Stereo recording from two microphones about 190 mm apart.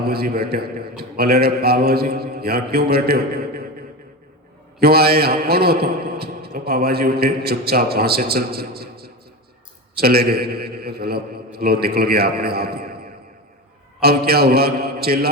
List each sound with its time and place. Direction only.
0.0 s a man's voice: 55° right (ahead or behind)
4.8 s a man's voice: 55° right (ahead or behind)
14.0 s a man's voice: 55° right (ahead or behind)